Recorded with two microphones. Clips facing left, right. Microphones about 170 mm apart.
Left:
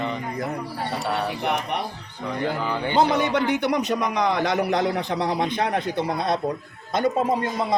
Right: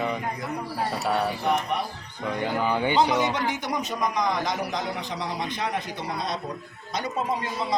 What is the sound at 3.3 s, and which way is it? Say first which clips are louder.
A man's voice: left 6 dB; 65° left (ahead or behind).